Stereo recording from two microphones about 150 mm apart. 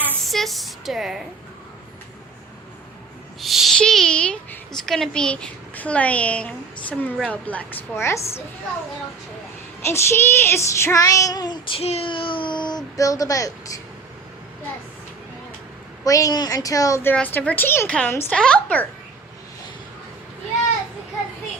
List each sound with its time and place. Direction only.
0.3 s speech: centre (ahead or behind)
3.4 s a woman's voice: centre (ahead or behind); by 8.4 s 20° left (ahead or behind)
9.8 s speech: 15° left (ahead or behind)
11.8 s speech: 40° left (ahead or behind); by 13.8 s 20° left (ahead or behind)
16.0 s a woman's voice: 25° left (ahead or behind); by 18.9 s 5° left (ahead or behind)